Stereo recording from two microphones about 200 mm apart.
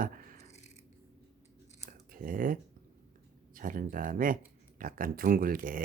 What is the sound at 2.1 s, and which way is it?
Speech, 45° right (ahead or behind).